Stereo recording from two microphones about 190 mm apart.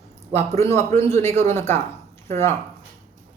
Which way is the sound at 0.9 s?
15° left (ahead or behind).